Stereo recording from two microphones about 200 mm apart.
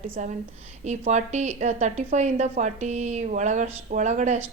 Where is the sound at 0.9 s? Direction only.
35° right (ahead or behind).